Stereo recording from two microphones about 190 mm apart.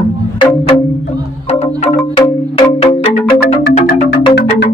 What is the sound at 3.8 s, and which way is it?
Music, 60° left (ahead or behind).